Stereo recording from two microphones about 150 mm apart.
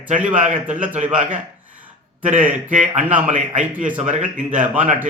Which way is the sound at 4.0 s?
55° right (ahead or behind).